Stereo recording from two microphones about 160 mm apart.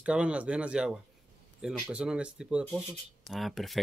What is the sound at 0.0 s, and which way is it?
Speech, 5° right (ahead or behind).